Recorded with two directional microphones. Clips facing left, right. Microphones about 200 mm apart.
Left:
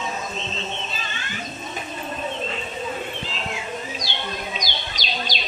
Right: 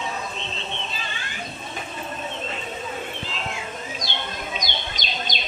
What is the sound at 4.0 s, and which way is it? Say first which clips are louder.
Music: left 1 dB; 50° right (ahead or behind).